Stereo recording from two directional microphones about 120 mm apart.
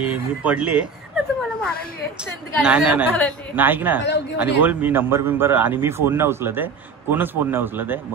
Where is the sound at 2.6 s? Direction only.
10° right (ahead or behind).